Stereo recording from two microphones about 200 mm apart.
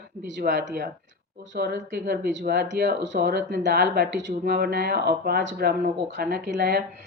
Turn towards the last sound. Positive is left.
turn(degrees=-50)  # may be behind; listen again after turning